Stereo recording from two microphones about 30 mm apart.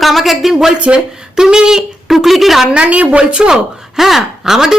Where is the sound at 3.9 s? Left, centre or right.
Centre.